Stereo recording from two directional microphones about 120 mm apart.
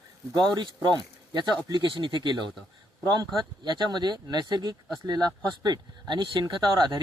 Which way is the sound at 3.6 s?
35° right (ahead or behind).